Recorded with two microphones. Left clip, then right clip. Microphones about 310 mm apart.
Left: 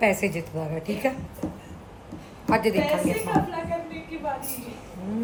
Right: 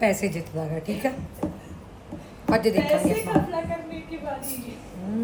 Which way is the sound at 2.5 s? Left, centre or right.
Centre.